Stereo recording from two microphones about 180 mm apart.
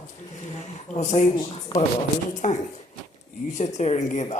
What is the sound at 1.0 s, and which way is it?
Speech, 40° left (ahead or behind).